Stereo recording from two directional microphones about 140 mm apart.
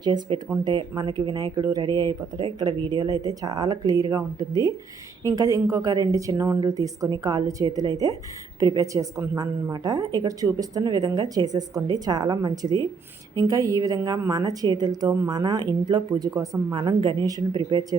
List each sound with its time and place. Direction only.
0.0 s a woman's voice: 30° right (ahead or behind)